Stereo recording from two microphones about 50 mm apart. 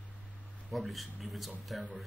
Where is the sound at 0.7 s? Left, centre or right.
Centre.